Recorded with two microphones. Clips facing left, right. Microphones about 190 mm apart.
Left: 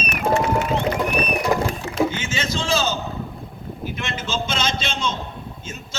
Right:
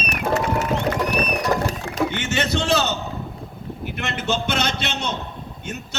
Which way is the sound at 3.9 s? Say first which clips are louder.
Right 4 dB; 65° right (ahead or behind).